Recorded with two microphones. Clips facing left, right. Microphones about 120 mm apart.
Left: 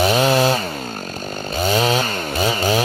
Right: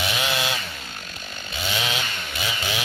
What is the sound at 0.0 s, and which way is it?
Chainsaw, 40° left (ahead or behind).